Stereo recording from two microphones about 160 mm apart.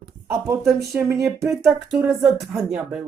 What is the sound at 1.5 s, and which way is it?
Speech, centre (ahead or behind).